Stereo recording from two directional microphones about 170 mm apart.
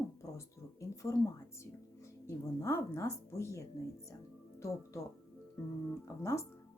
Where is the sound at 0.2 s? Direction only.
20° left (ahead or behind).